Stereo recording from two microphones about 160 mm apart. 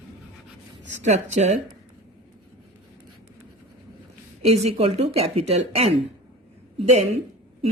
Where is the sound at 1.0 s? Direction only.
45° right (ahead or behind).